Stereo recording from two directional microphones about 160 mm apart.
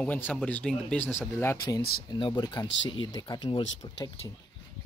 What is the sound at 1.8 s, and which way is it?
Speech, 70° left (ahead or behind).